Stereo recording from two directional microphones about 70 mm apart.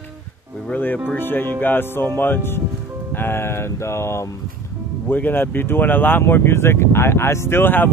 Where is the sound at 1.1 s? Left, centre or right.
Left.